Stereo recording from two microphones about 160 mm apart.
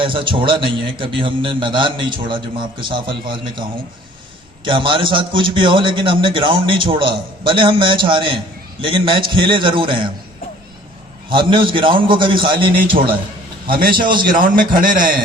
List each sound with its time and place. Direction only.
0.0 s a man's voice: 30° right (ahead or behind)
11.3 s a man's voice: 30° right (ahead or behind)
13.7 s a man's voice: 65° right (ahead or behind)